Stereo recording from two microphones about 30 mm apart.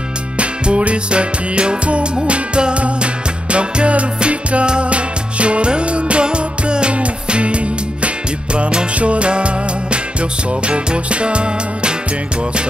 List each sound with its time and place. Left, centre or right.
0.4 s music: right